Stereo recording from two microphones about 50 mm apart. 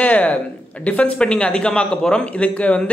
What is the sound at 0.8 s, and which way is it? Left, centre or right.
Speech, left.